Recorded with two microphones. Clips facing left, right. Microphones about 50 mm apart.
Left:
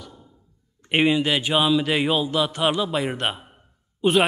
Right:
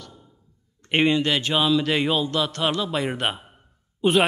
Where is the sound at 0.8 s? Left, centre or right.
Centre.